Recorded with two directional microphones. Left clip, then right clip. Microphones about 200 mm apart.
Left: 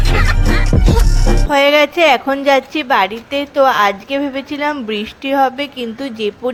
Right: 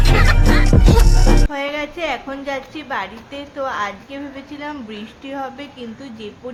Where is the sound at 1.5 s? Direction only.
50° left (ahead or behind).